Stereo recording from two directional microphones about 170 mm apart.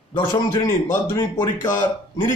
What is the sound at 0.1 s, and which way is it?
Speech, 30° left (ahead or behind).